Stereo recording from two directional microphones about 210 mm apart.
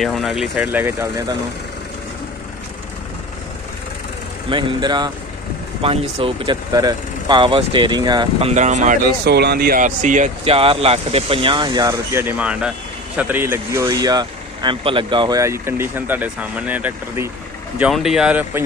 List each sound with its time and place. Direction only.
0.0 s speech: centre (ahead or behind)
4.5 s speech: 20° right (ahead or behind)
9.2 s speech: 50° right (ahead or behind); by 18.6 s 5° right (ahead or behind)